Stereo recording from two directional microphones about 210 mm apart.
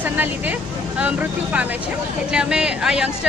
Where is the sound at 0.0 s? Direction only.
10° right (ahead or behind).